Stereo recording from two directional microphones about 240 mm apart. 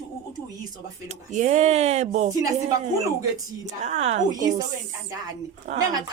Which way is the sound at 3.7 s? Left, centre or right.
Right.